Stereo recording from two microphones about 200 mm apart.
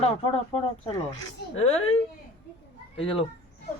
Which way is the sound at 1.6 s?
30° left (ahead or behind).